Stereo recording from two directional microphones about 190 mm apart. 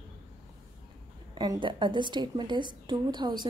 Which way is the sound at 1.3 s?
25° right (ahead or behind).